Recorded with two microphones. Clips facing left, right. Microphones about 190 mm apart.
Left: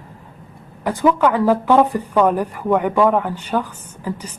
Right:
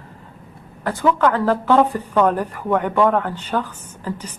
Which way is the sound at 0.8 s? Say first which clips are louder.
Left 2 dB; 15° left (ahead or behind).